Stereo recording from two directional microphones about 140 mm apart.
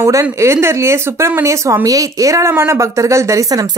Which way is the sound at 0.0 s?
20° right (ahead or behind).